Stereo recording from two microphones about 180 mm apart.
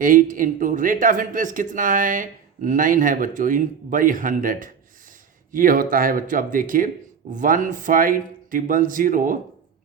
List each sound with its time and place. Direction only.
0.0 s speech: 45° right (ahead or behind)